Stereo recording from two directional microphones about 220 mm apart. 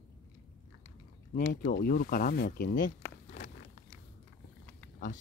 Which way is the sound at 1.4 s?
35° left (ahead or behind).